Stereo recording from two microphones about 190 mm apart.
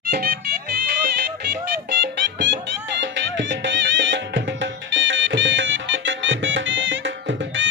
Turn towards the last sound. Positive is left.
turn(degrees=-75)  # may be behind; listen again after turning